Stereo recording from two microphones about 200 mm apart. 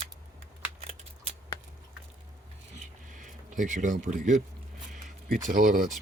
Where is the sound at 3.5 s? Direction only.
40° right (ahead or behind).